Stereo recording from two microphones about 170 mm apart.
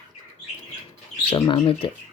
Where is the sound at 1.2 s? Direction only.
30° left (ahead or behind).